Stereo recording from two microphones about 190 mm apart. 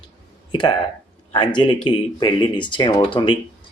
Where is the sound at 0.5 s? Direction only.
25° left (ahead or behind).